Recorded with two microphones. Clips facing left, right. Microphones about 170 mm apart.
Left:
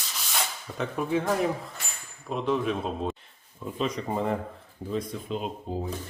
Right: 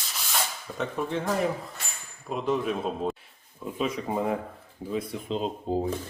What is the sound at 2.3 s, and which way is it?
A man's voice, centre (ahead or behind).